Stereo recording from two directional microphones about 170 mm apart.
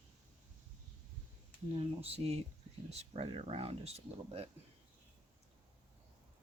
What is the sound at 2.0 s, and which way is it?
Speech, 35° right (ahead or behind).